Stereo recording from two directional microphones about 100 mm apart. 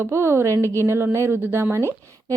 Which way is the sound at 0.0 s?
25° right (ahead or behind).